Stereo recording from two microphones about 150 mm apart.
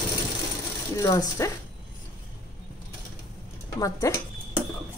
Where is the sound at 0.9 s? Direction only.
25° left (ahead or behind).